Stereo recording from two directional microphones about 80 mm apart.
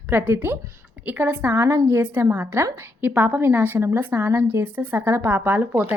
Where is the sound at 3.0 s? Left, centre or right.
Right.